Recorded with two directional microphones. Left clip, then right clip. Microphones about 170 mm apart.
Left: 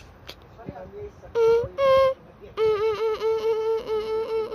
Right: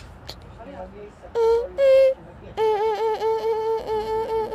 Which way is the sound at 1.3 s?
20° left (ahead or behind).